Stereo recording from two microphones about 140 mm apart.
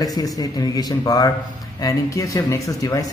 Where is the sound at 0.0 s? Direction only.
25° left (ahead or behind).